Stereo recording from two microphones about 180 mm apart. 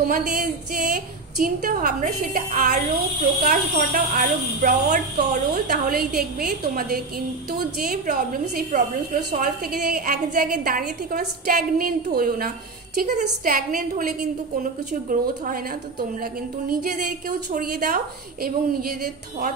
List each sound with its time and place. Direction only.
0.0 s a woman's voice: 50° right (ahead or behind)
16.6 s a woman's voice: 50° right (ahead or behind)